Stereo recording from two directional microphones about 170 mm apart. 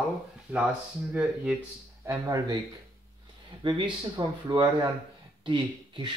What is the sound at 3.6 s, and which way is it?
Speech, 30° right (ahead or behind).